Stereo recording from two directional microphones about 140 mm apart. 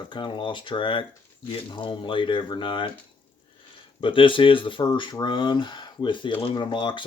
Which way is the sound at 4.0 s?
35° left (ahead or behind).